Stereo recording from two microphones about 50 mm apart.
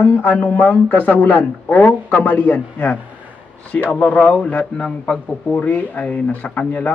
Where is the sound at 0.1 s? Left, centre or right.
Left.